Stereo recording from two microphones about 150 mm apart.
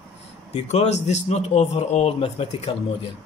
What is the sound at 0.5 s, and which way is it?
A man's voice, 45° left (ahead or behind).